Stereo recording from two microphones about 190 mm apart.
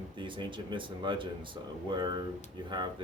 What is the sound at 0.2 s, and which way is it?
Speech, 25° right (ahead or behind).